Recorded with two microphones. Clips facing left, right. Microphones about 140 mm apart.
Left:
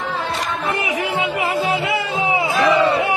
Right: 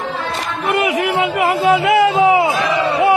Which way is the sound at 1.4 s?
65° right (ahead or behind).